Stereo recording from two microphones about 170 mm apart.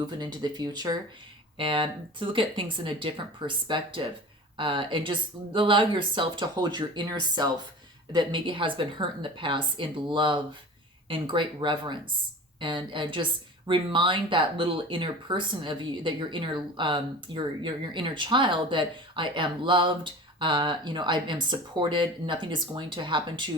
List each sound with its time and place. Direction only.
0.2 s speech: 25° right (ahead or behind)